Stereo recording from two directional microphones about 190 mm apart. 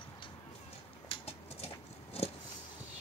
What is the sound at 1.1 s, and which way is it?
Horse, 35° left (ahead or behind).